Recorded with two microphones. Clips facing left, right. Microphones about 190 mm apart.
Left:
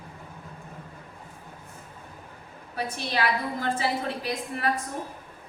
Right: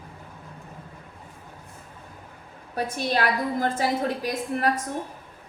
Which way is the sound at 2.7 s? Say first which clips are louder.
Right 4 dB; 45° right (ahead or behind).